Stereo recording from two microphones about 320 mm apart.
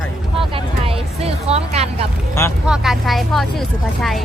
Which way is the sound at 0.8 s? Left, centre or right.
Centre.